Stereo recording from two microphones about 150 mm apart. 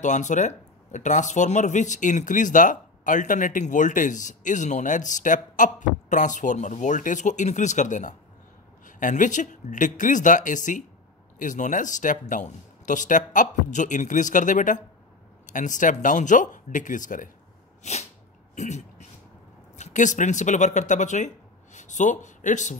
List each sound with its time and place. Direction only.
0.0 s speech: 55° left (ahead or behind)
18.5 s a sound: 50° left (ahead or behind)
19.8 s speech: 55° left (ahead or behind)